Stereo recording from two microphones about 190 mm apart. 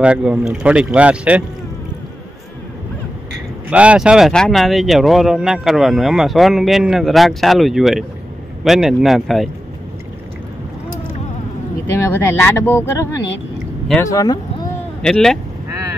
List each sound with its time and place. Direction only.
0.0 s a man's voice: 5° right (ahead or behind)
3.7 s speech: 5° right (ahead or behind)
11.9 s speech: 15° left (ahead or behind)
15.0 s speech: 5° left (ahead or behind)